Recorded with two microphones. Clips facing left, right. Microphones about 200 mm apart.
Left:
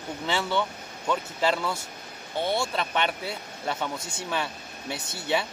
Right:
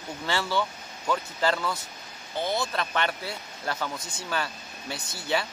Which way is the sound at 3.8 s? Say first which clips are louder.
Left 2 dB; 25° left (ahead or behind).